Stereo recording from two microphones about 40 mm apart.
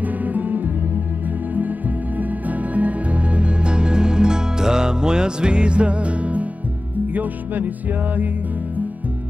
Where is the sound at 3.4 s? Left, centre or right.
Right.